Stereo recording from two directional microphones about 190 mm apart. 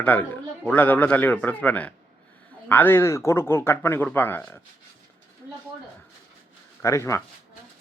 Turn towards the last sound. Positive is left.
turn(degrees=15)  # may be behind; listen again after turning